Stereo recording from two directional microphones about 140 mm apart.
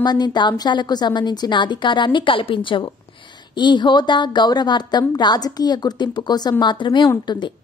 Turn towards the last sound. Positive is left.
turn(degrees=30)  # may be behind; listen again after turning